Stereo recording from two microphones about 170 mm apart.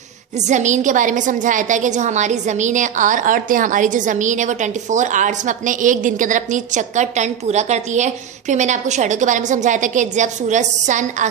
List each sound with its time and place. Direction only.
0.4 s a woman's voice: 45° right (ahead or behind)